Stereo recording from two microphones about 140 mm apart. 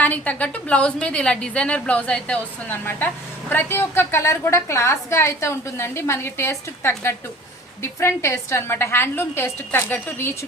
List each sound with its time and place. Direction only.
0.0 s a woman's voice: 10° left (ahead or behind)